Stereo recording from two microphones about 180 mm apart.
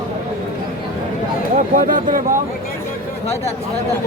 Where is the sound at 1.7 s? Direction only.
50° right (ahead or behind).